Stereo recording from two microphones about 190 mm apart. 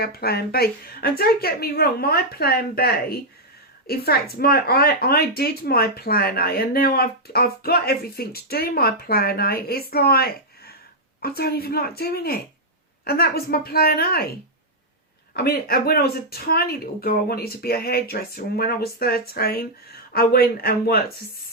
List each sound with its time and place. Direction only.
0.0 s speech: 55° left (ahead or behind)
15.3 s speech: 55° left (ahead or behind)